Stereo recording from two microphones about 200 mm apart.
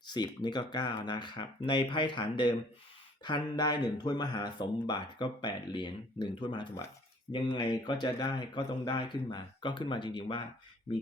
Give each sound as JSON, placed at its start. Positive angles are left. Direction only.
{"t": 0.1, "sound": "speech", "side_deg": 20}